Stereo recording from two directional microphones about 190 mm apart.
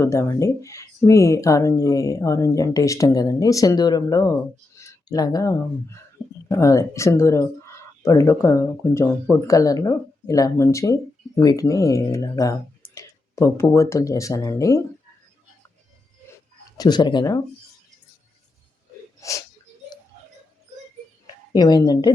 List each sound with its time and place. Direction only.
0.0 s speech: 15° left (ahead or behind)
16.7 s speech: 20° left (ahead or behind)
19.2 s speech: 15° left (ahead or behind)
21.5 s speech: 20° left (ahead or behind)